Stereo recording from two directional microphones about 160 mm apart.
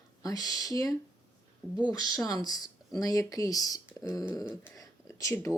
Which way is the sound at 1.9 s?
25° left (ahead or behind).